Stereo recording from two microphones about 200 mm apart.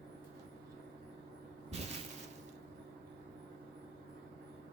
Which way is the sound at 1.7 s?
30° right (ahead or behind).